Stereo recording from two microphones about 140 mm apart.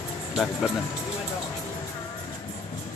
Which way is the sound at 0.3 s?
Centre (ahead or behind).